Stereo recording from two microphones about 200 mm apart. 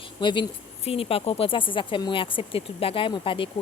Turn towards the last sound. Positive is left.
turn(degrees=25)  # may be behind; listen again after turning